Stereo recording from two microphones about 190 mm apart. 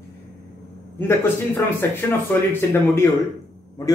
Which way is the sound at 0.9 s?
10° left (ahead or behind).